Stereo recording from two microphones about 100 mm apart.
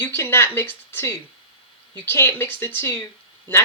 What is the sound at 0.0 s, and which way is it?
Speech, 25° left (ahead or behind).